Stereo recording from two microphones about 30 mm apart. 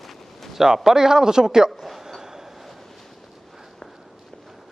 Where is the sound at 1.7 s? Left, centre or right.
Centre.